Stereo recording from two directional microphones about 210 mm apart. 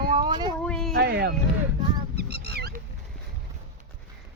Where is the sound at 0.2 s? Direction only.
20° right (ahead or behind).